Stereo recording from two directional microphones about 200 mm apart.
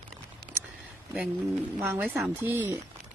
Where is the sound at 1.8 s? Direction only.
10° right (ahead or behind).